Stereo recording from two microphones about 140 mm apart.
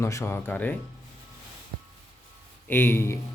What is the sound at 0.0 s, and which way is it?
Speech, 20° left (ahead or behind).